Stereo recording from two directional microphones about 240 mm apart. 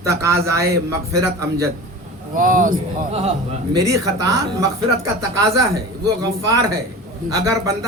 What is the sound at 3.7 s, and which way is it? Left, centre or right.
Speech, centre.